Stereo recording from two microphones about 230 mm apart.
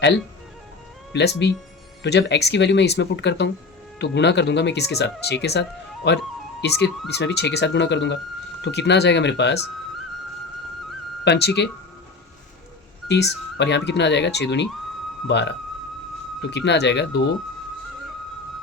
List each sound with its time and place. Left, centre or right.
1.1 s speech: left
11.3 s speech: left
13.1 s speech: left